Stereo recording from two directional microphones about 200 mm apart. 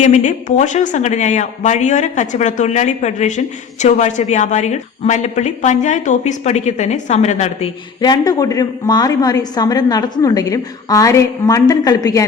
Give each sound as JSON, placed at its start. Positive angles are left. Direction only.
{"t": 0.0, "sound": "speech", "side_deg": 35}